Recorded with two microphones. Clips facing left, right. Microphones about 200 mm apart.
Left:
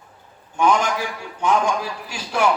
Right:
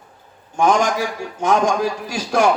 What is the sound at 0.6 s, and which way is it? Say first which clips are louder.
A man's voice: right 2 dB; 45° right (ahead or behind).